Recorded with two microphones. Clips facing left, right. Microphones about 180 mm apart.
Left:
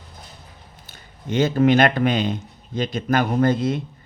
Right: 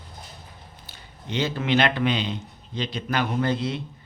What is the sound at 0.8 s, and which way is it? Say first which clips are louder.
Speech: left 7 dB; 45° left (ahead or behind).